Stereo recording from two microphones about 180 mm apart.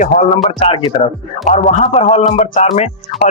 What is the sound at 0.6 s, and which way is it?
Speech, 30° left (ahead or behind).